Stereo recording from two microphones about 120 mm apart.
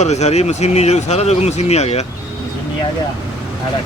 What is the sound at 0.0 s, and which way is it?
Speech, 70° left (ahead or behind).